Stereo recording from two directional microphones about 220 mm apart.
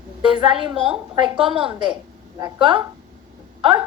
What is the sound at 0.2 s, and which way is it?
A woman's voice, 20° right (ahead or behind).